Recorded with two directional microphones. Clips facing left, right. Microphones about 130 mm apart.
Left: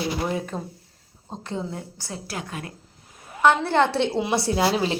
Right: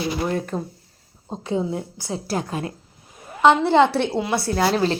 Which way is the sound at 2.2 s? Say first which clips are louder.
Right 8 dB; 40° right (ahead or behind).